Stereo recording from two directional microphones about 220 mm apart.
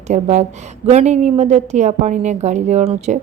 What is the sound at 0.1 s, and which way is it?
A woman's voice, 30° right (ahead or behind).